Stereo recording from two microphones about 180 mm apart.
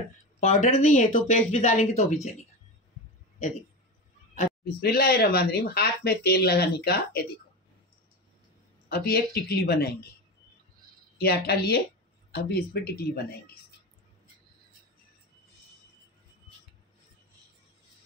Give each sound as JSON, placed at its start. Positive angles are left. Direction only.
{"t": 0.4, "sound": "speech", "side_deg": 40}
{"t": 4.6, "sound": "speech", "side_deg": 60}
{"t": 8.8, "sound": "speech", "side_deg": 60}
{"t": 11.1, "sound": "speech", "side_deg": 60}